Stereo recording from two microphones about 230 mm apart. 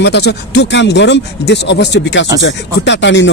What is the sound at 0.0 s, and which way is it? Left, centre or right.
A man's voice, left.